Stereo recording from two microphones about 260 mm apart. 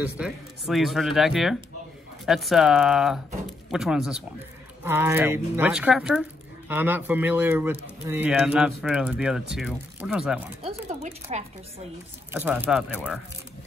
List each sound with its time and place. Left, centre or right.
0.0 s speech: centre
10.6 s a sound: right
12.3 s speech: centre